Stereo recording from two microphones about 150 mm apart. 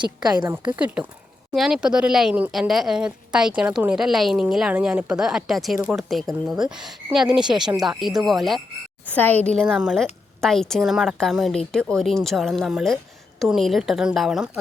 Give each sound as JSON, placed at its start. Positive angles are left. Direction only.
{"t": 0.0, "sound": "a woman's voice", "side_deg": -25}
{"t": 0.8, "sound": "a woman's voice", "side_deg": -10}
{"t": 9.6, "sound": "speech", "side_deg": -5}